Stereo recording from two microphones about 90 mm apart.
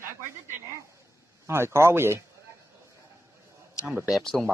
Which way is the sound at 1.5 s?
30° right (ahead or behind).